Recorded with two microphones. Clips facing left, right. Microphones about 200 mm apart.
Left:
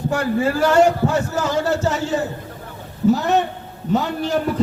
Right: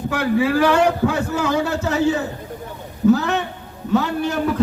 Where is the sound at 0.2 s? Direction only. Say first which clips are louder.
Right 3 dB; 65° right (ahead or behind).